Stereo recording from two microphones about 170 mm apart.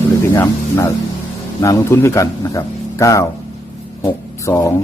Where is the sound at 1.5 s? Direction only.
20° left (ahead or behind).